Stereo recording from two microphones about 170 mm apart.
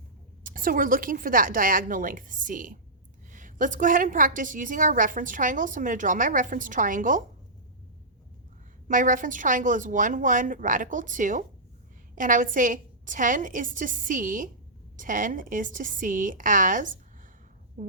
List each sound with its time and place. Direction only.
0.4 s a woman's voice: 55° right (ahead or behind)
8.9 s a woman's voice: 50° right (ahead or behind)